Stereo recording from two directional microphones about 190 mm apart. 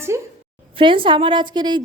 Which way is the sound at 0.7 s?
25° right (ahead or behind).